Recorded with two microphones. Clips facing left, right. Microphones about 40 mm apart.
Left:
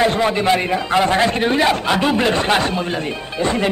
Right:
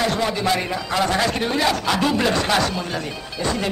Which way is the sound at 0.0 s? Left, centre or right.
Left.